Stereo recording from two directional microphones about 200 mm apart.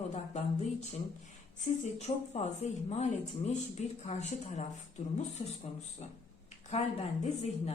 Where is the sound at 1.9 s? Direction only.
35° left (ahead or behind).